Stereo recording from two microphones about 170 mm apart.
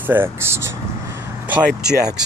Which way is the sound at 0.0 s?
10° right (ahead or behind).